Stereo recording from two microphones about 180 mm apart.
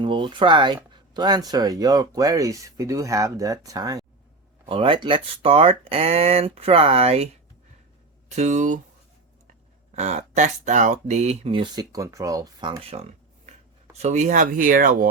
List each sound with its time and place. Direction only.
0.0 s speech: 25° right (ahead or behind)
8.4 s speech: 40° right (ahead or behind)
9.9 s speech: 40° right (ahead or behind)